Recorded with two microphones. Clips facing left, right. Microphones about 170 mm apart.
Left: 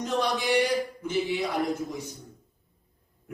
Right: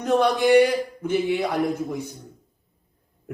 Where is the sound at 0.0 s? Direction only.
55° right (ahead or behind).